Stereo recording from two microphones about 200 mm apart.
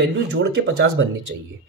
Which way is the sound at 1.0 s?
75° right (ahead or behind).